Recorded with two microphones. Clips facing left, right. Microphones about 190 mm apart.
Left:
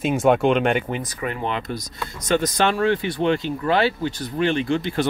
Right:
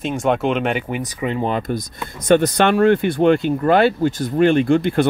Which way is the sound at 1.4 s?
40° right (ahead or behind).